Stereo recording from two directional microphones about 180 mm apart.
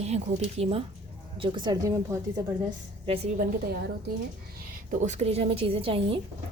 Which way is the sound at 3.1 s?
30° right (ahead or behind).